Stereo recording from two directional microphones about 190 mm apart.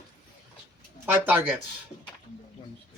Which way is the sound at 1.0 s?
10° right (ahead or behind).